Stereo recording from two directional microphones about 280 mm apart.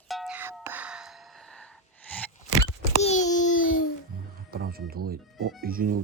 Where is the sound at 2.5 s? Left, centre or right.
Left.